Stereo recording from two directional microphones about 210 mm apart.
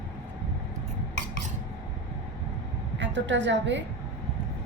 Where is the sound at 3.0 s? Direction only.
60° right (ahead or behind).